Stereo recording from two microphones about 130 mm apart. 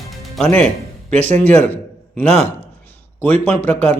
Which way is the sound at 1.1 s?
15° left (ahead or behind).